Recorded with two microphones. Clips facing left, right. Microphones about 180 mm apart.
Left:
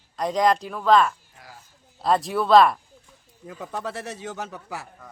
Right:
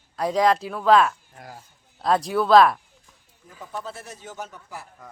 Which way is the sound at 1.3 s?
50° right (ahead or behind).